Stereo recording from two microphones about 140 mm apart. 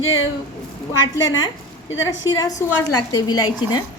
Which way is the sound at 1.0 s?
25° left (ahead or behind).